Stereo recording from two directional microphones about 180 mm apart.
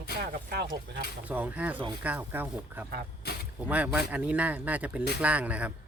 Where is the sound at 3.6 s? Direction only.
10° right (ahead or behind).